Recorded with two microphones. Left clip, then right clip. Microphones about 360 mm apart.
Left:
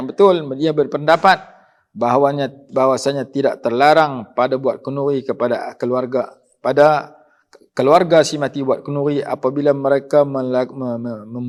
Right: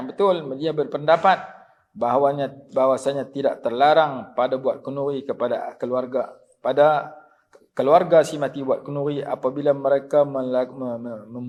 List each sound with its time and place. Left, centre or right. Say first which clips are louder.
0.0 s speech: left 7 dB; left